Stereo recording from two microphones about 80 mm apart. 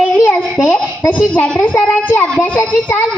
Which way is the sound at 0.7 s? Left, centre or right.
Left.